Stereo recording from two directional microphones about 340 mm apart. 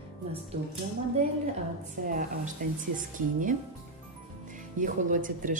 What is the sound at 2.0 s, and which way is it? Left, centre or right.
Speech, right.